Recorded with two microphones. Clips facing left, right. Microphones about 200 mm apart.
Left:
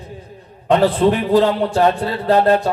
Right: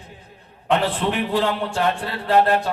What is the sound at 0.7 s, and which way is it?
A man's voice, 40° left (ahead or behind).